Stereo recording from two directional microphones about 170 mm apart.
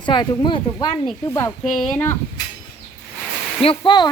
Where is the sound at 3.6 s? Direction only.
30° left (ahead or behind).